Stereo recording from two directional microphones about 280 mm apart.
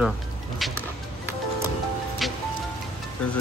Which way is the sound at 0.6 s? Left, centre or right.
Centre.